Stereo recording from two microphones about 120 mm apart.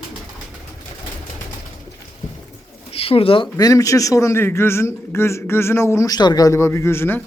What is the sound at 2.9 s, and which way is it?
Speech, 55° left (ahead or behind).